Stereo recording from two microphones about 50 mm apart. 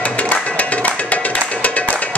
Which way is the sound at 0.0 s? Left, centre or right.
Left.